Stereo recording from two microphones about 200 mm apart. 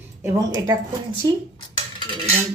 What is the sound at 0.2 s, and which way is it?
Speech, 15° right (ahead or behind).